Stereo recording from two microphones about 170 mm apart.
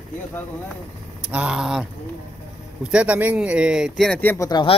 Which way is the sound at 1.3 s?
5° right (ahead or behind).